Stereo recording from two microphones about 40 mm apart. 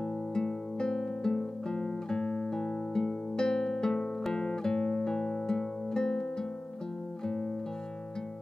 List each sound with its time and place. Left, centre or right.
0.3 s music: centre
4.2 s guitar: centre
5.1 s music: centre